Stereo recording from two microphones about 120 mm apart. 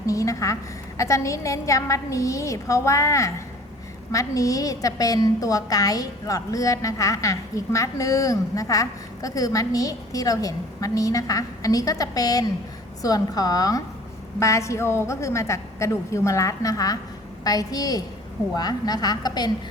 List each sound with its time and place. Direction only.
0.0 s a woman's voice: 25° left (ahead or behind)